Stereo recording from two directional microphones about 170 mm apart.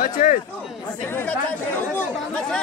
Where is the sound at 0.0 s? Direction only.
55° left (ahead or behind).